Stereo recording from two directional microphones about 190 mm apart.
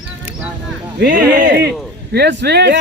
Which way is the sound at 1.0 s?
55° right (ahead or behind).